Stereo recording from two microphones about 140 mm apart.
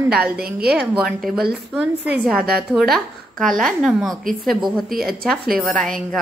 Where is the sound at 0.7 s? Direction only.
Centre (ahead or behind).